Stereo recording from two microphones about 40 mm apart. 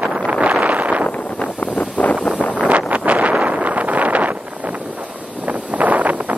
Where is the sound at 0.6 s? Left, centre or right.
Right.